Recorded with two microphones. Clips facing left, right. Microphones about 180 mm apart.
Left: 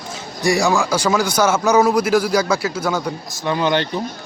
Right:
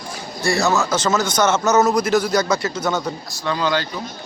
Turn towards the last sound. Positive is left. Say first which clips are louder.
# left 3 dB
turn(degrees=20)  # may be behind; listen again after turning